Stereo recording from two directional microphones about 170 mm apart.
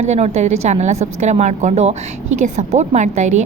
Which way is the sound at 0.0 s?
40° right (ahead or behind).